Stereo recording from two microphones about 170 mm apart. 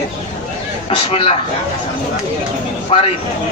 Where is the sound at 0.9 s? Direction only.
35° left (ahead or behind).